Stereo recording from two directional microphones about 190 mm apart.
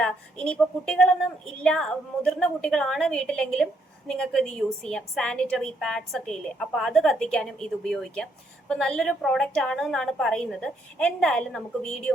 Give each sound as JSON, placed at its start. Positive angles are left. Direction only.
{"t": 0.0, "sound": "a woman's voice", "side_deg": 5}